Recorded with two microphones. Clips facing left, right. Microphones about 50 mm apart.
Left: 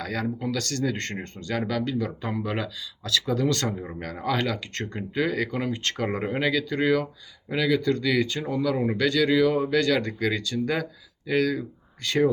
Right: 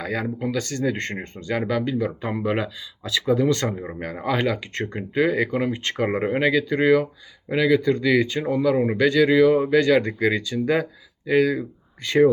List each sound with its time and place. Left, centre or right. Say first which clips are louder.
0.0 s speech: right 3 dB; centre